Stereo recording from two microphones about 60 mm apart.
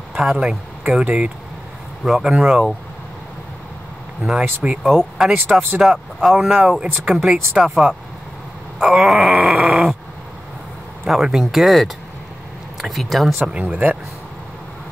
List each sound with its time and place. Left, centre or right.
0.2 s speech: centre
2.0 s speech: centre
4.2 s groan: centre
4.8 s speech: centre
5.8 s groan: centre
6.3 s speech: centre
8.8 s groan: centre
11.1 s groan: centre
13.5 s speech: right